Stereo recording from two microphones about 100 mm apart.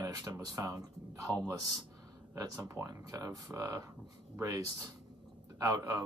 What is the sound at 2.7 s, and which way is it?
Speech, 30° right (ahead or behind).